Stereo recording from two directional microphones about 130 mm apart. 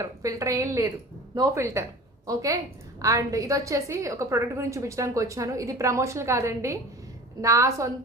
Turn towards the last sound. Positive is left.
turn(degrees=-25)  # may be behind; listen again after turning